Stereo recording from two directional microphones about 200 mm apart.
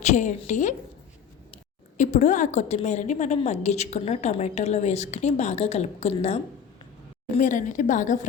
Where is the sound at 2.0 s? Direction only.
35° left (ahead or behind).